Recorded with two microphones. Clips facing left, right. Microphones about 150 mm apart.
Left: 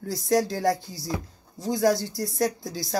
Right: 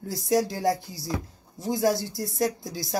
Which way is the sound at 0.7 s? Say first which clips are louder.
Even; 20° left (ahead or behind).